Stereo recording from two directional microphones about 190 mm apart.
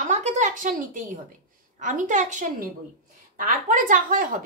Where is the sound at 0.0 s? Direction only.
40° right (ahead or behind).